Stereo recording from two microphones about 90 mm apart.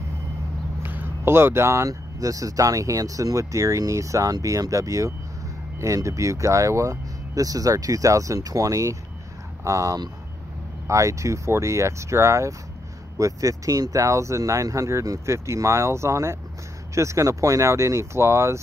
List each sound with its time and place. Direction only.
0.8 s speech: 25° right (ahead or behind)